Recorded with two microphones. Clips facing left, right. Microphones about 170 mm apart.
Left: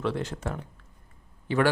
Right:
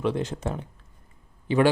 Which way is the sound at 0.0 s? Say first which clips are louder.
Right 3 dB; 20° right (ahead or behind).